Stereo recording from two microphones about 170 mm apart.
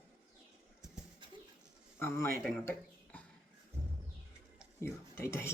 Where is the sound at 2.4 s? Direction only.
5° left (ahead or behind).